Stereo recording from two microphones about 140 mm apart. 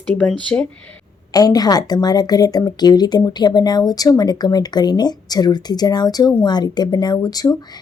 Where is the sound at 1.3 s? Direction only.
25° left (ahead or behind).